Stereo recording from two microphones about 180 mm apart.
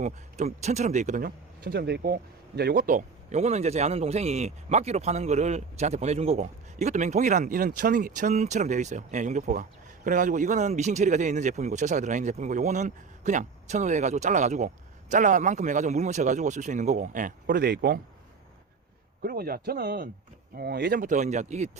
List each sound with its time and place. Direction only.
0.0 s a man's voice: 40° right (ahead or behind); by 18.0 s 60° right (ahead or behind)
19.2 s a man's voice: 55° right (ahead or behind)